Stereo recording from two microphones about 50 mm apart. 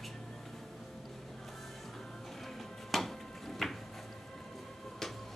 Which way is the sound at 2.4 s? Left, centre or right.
Centre.